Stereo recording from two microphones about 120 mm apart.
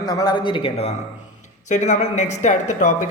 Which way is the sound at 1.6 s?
85° left.